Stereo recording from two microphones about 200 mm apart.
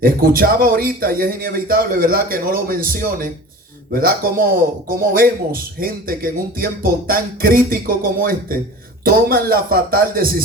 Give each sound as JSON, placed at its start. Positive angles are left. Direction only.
{"t": 0.0, "sound": "speech", "side_deg": -45}